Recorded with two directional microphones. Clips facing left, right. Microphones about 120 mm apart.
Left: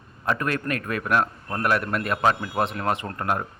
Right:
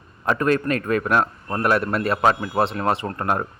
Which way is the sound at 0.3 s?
30° right (ahead or behind).